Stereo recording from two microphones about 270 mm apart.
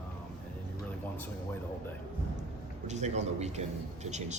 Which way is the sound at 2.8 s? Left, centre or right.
Right.